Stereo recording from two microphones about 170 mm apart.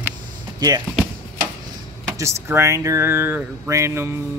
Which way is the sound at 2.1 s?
15° right (ahead or behind).